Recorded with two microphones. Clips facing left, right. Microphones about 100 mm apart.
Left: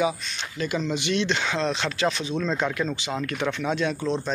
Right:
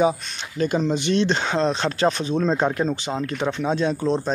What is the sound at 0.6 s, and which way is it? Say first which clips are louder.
Speech: right 6 dB; 40° right (ahead or behind).